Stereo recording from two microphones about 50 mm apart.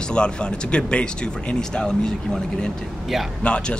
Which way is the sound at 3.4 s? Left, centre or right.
Left.